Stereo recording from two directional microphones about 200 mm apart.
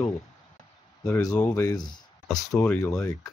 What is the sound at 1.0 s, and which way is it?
Speech, 15° left (ahead or behind).